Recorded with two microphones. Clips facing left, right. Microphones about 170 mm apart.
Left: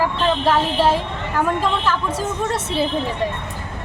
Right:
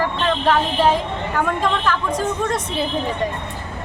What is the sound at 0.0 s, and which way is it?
A woman's voice, 10° left (ahead or behind).